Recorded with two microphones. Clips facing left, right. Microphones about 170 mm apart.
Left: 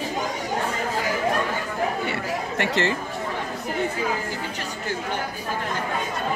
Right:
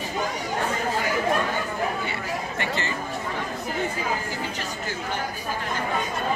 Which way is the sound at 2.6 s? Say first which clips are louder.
Left 8 dB; 85° left.